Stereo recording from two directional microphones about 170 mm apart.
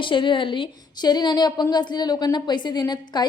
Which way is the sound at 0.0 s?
30° left (ahead or behind).